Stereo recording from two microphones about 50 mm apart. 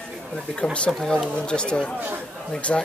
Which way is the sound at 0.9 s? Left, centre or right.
Centre.